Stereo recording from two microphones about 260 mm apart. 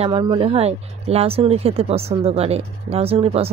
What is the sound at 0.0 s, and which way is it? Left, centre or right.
Speech, centre.